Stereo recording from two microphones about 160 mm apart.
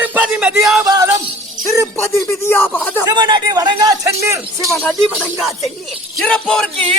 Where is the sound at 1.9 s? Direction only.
15° left (ahead or behind).